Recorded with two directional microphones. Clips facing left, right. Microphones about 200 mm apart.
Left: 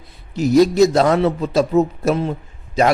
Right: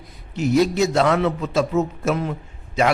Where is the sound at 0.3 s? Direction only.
40° left (ahead or behind).